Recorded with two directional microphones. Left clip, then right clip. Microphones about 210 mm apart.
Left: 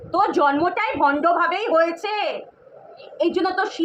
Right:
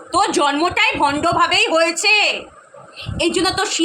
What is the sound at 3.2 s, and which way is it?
Speech, 5° right (ahead or behind).